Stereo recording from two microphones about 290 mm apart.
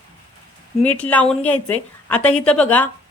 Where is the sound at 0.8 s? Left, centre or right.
Centre.